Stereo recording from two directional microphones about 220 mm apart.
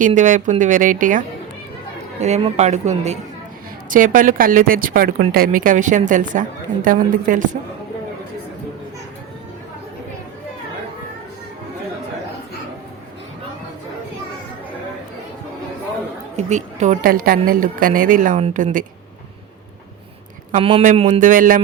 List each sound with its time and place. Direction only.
0.0 s speech: 35° right (ahead or behind)
16.4 s speech: 30° right (ahead or behind)
20.6 s a man's voice: 20° right (ahead or behind)
20.8 s speech: 35° right (ahead or behind)